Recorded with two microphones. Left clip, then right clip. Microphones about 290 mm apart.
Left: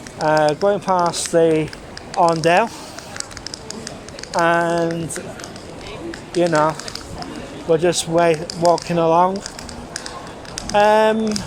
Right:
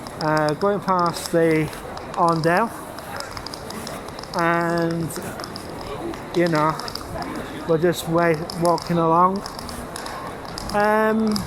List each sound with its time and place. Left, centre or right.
0.2 s speech: left
4.4 s speech: left
6.4 s speech: left
10.8 s speech: left